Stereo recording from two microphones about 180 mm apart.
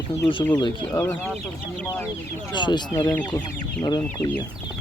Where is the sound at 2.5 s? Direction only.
25° left (ahead or behind).